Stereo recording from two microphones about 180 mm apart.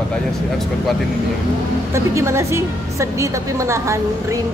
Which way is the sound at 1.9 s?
15° right (ahead or behind).